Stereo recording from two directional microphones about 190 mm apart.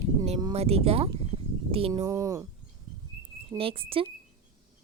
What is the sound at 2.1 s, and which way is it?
Speech, 15° right (ahead or behind).